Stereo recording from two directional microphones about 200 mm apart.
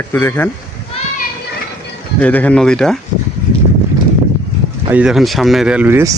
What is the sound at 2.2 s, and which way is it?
Speech, 5° left (ahead or behind).